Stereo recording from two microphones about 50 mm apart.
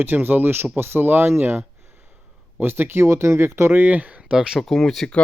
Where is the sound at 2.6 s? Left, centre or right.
Right.